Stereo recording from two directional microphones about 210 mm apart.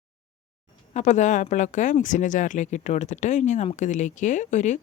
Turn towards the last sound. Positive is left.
turn(degrees=35)  # may be behind; listen again after turning